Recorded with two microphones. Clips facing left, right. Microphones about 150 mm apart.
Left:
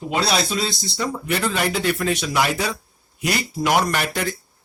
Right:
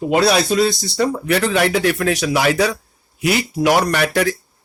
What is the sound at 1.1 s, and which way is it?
Speech, 70° right (ahead or behind).